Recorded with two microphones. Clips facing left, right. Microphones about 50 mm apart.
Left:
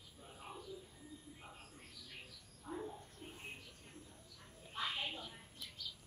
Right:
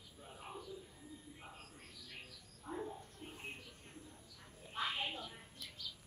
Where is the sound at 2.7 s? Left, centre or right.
Centre.